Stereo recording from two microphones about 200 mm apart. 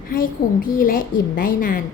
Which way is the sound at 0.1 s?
45° left (ahead or behind).